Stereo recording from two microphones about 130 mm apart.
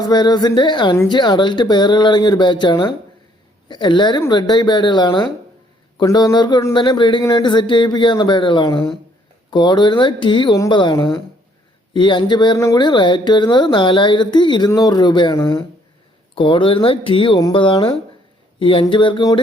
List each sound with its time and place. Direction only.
0.1 s speech: 35° left (ahead or behind)
11.9 s speech: 35° left (ahead or behind)